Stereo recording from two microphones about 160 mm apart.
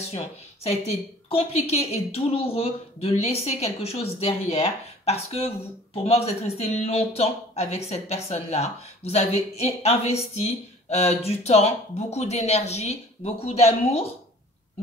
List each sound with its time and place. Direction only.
0.8 s speech: 40° left (ahead or behind)